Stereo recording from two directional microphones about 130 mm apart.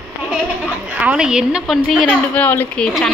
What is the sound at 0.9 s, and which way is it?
A woman's voice, 10° right (ahead or behind).